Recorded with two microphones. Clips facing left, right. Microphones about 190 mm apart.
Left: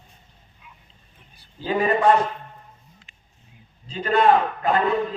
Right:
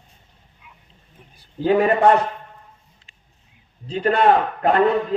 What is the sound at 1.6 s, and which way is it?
Speech, 65° right (ahead or behind).